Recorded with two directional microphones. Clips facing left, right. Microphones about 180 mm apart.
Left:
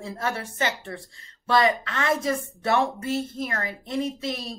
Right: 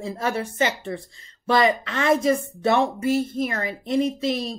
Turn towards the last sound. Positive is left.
turn(degrees=-20)  # may be behind; listen again after turning